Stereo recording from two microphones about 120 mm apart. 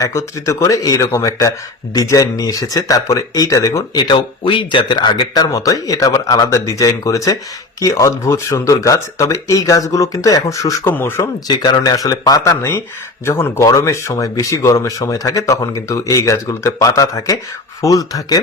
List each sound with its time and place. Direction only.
0.0 s speech: 25° left (ahead or behind)
3.9 s speech: 40° left (ahead or behind); by 11.3 s 20° left (ahead or behind)
11.4 s speech: 35° left (ahead or behind)